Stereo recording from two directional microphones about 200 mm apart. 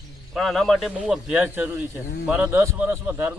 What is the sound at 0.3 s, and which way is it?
A man's voice, centre (ahead or behind).